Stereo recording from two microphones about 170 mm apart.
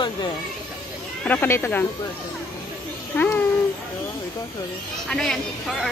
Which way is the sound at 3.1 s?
10° left (ahead or behind).